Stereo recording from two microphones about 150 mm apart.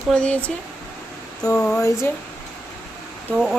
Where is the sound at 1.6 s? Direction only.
15° left (ahead or behind).